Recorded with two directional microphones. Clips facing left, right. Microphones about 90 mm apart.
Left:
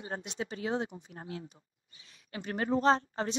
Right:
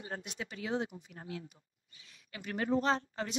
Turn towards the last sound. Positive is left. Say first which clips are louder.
# left 6 dB
turn(degrees=35)  # may be behind; listen again after turning